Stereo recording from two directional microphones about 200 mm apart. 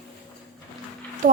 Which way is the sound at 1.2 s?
40° right (ahead or behind).